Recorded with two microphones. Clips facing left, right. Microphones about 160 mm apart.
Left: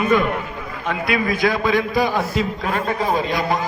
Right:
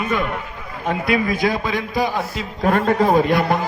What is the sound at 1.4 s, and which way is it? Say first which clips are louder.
A man's voice: left 3 dB; 30° right (ahead or behind).